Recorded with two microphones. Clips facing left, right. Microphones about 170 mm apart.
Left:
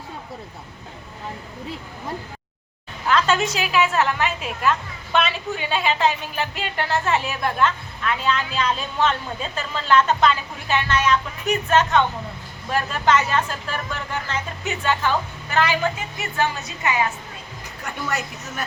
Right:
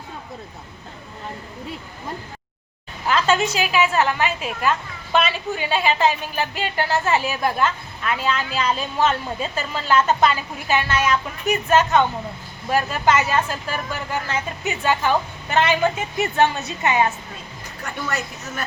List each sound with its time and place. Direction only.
3.1 s a woman's voice: centre (ahead or behind)
15.4 s a woman's voice: 20° right (ahead or behind)